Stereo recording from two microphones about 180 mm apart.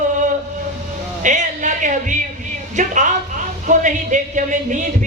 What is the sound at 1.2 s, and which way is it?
Music, 45° right (ahead or behind).